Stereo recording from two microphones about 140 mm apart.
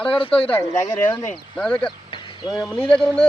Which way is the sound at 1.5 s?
10° left (ahead or behind).